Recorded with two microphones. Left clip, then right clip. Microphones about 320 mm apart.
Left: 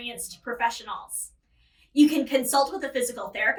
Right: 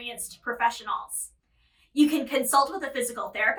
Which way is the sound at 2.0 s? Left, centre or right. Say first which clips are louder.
Left 2 dB; right.